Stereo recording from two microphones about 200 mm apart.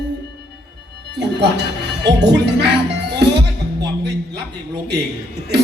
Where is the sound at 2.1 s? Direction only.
60° right (ahead or behind).